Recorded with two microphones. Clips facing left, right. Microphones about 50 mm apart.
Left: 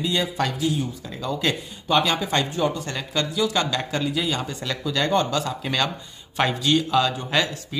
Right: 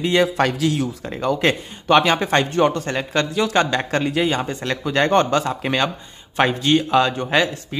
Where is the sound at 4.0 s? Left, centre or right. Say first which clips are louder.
Right 6 dB; right.